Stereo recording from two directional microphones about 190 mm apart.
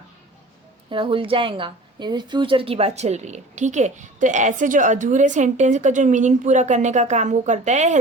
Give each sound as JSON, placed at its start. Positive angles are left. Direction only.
{"t": 0.9, "sound": "a woman's voice", "side_deg": -25}